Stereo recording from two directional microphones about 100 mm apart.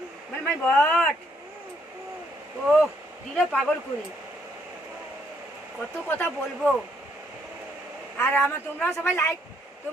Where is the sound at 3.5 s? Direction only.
10° left (ahead or behind).